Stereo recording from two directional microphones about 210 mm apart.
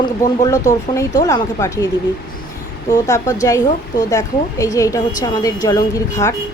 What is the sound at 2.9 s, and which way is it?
A woman's voice, 15° left (ahead or behind).